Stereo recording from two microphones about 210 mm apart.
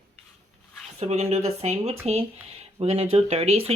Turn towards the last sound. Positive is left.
turn(degrees=-30)  # may be behind; listen again after turning